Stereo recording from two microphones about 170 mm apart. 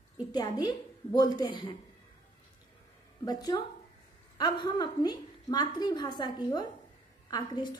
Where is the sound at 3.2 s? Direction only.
25° left (ahead or behind).